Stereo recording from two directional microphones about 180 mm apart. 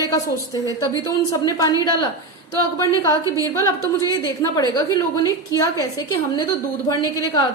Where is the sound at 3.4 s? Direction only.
15° left (ahead or behind).